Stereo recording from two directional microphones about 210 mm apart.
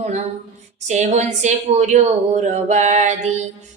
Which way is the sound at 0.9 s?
35° right (ahead or behind).